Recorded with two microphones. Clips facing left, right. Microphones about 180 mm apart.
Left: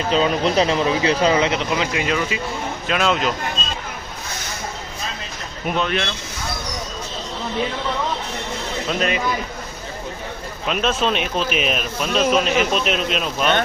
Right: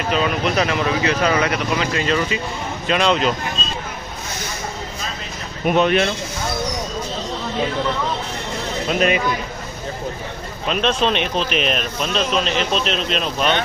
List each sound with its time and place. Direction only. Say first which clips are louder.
0.1 s speech: left 2 dB; 30° left (ahead or behind); by 3.3 s 5° left (ahead or behind)
5.6 s speech: right 6 dB; 20° right (ahead or behind)
8.9 s speech: right 4 dB; 15° right (ahead or behind)
10.7 s speech: right 1 dB; 5° left (ahead or behind)